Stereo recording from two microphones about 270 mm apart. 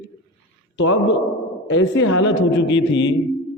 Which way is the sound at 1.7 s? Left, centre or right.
Left.